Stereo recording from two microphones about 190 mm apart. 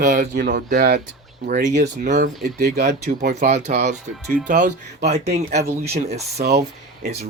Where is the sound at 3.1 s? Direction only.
50° right (ahead or behind).